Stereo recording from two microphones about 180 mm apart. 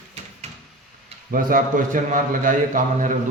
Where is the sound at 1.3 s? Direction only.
50° right (ahead or behind).